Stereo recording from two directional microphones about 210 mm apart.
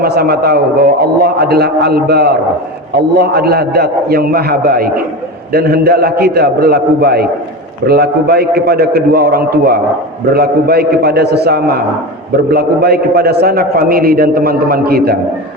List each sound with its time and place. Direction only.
0.0 s a man's voice: 50° right (ahead or behind)